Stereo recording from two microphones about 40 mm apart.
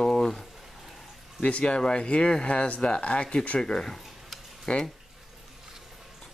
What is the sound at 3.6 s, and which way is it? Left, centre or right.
Speech, centre.